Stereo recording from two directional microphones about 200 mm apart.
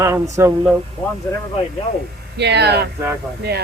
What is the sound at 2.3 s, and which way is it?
Speech, 60° right (ahead or behind).